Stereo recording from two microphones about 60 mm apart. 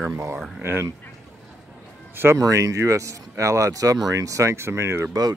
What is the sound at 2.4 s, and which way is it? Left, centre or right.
Speech, right.